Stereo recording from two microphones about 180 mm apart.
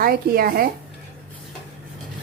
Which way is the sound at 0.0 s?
55° right (ahead or behind).